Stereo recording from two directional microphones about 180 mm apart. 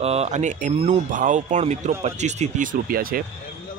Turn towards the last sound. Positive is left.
turn(degrees=-55)  # may be behind; listen again after turning